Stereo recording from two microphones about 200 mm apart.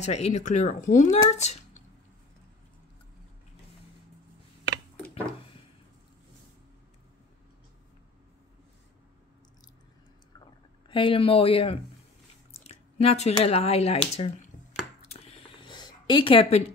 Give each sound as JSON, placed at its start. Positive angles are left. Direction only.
{"t": 0.0, "sound": "speech", "side_deg": 35}
{"t": 10.9, "sound": "speech", "side_deg": 25}
{"t": 12.6, "sound": "a sound", "side_deg": 30}